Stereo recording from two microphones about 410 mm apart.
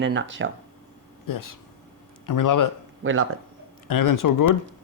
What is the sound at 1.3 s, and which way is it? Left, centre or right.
Speech, left.